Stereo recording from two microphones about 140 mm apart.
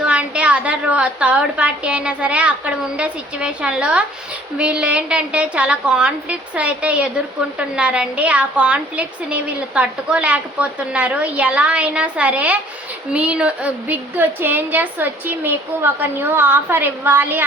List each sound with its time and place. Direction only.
0.0 s a woman's voice: 10° right (ahead or behind)